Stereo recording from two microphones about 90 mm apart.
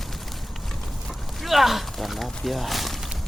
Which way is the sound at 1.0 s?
Centre (ahead or behind).